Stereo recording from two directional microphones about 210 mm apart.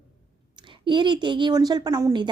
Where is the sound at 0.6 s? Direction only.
20° right (ahead or behind).